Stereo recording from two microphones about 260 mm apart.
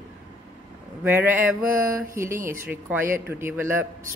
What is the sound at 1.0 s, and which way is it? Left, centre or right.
Speech, centre.